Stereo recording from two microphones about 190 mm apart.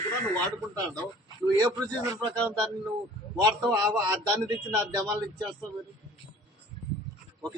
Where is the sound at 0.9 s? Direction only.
20° right (ahead or behind).